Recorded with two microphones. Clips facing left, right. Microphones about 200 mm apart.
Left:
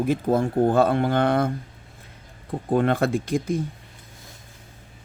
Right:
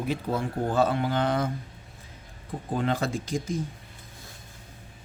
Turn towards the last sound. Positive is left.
turn(degrees=60)  # may be behind; listen again after turning